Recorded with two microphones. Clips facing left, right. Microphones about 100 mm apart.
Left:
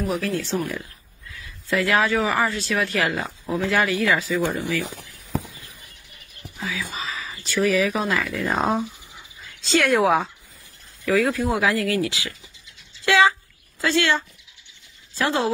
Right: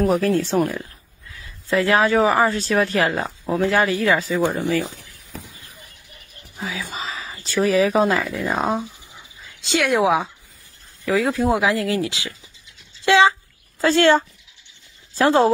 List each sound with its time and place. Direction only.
0.0 s speech: 45° right (ahead or behind)
1.3 s speech: 30° right (ahead or behind)
6.5 s speech: 30° right (ahead or behind)
8.5 s speech: centre (ahead or behind)
9.7 s speech: 10° right (ahead or behind)
11.1 s speech: 20° right (ahead or behind)
13.7 s speech: 35° right (ahead or behind)